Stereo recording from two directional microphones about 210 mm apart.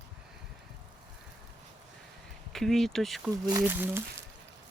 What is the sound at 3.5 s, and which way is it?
Speech, 15° right (ahead or behind).